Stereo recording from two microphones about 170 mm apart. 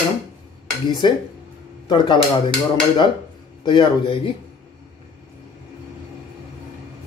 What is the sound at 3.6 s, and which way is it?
Speech, 30° left (ahead or behind).